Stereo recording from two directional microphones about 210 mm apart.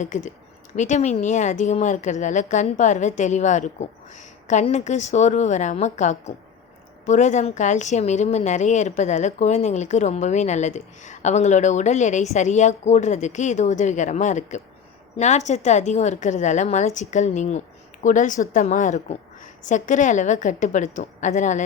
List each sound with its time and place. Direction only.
0.0 s a woman's voice: 35° left (ahead or behind)